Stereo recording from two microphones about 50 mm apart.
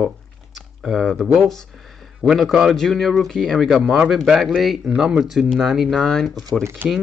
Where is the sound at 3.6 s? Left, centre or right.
Centre.